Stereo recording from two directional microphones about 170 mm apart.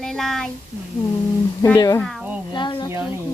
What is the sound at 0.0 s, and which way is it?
Speech, 5° left (ahead or behind).